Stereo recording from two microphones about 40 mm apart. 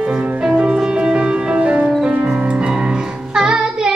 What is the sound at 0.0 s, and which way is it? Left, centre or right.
Music, right.